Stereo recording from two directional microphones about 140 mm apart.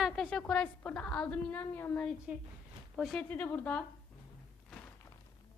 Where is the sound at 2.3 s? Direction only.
10° right (ahead or behind).